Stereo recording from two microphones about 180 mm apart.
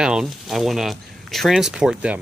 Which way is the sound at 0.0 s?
5° right (ahead or behind).